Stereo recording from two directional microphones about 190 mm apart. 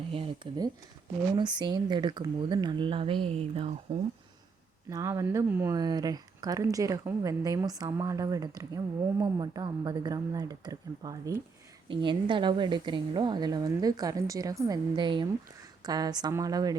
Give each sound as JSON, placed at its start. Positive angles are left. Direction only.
{"t": 0.1, "sound": "speech", "side_deg": -25}
{"t": 4.9, "sound": "speech", "side_deg": -15}